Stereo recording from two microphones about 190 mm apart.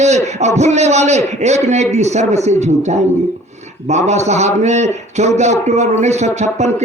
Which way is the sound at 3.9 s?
35° right (ahead or behind).